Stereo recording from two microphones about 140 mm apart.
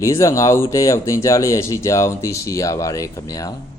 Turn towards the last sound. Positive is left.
turn(degrees=25)  # may be behind; listen again after turning